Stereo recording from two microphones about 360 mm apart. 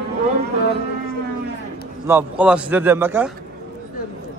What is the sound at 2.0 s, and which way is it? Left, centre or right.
A man's voice, centre.